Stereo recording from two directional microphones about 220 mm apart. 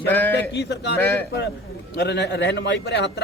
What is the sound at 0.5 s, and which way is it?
Speech, 50° left (ahead or behind).